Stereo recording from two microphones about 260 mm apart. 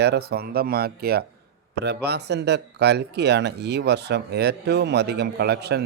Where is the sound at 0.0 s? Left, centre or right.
Right.